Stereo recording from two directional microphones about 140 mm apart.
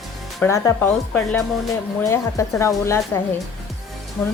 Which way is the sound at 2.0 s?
20° left (ahead or behind).